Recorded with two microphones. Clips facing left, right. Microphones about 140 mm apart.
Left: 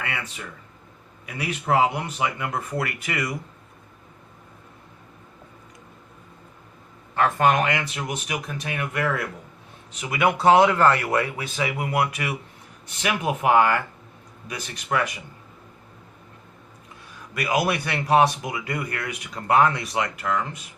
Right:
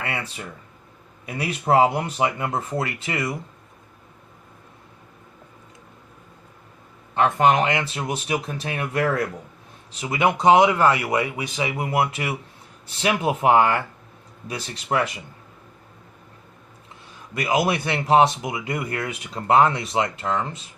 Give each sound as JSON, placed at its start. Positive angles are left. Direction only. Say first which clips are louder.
{"t": 0.0, "sound": "speech", "louder": "right 2 dB", "side_deg": -30}
{"t": 7.1, "sound": "speech", "louder": "right 2 dB", "side_deg": -20}
{"t": 17.3, "sound": "speech", "louder": "right 2 dB", "side_deg": -25}